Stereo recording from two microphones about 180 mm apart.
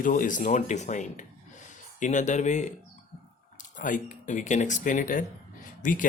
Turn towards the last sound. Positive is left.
turn(degrees=45)  # may be behind; listen again after turning